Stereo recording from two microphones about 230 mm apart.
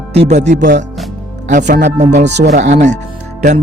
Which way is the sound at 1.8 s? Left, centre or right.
Right.